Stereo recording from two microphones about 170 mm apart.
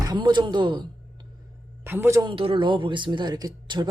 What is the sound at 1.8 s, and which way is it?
Speech, 15° right (ahead or behind).